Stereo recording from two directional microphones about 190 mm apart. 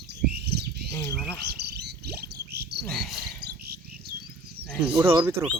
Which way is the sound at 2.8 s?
Centre (ahead or behind).